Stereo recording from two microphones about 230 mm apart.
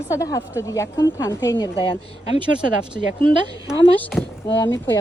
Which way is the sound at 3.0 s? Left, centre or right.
Left.